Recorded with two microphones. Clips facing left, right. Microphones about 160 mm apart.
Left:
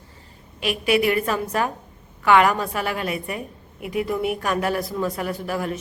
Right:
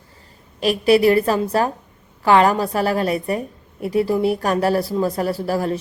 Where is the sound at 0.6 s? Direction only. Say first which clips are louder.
Right 6 dB; 35° right (ahead or behind).